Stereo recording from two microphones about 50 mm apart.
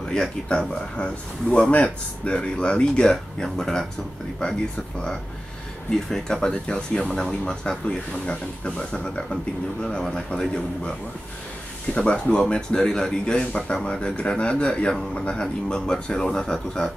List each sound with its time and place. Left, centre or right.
0.1 s speech: centre
5.9 s speech: centre
12.0 s speech: left